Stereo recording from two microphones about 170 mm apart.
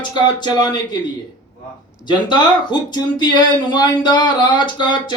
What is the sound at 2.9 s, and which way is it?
Speech, 25° left (ahead or behind).